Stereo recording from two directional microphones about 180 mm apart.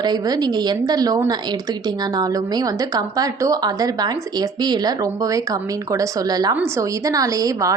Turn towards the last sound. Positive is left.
turn(degrees=-20)  # may be behind; listen again after turning